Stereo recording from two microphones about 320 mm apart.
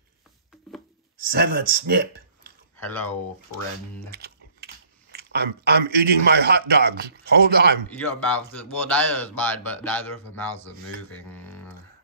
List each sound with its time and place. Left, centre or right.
1.2 s speech: right
2.8 s speech: centre
4.1 s typing: right
5.1 s a man's voice: right
7.9 s speech: centre
11.2 s a sound: centre